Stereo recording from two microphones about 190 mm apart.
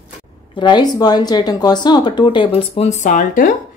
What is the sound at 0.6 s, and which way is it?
Speech, 25° left (ahead or behind).